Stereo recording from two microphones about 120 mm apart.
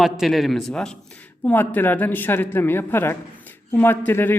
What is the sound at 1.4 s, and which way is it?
A man's voice, 15° left (ahead or behind).